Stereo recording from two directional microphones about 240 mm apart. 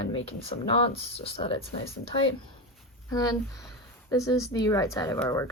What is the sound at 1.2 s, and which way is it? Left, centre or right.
Speech, left.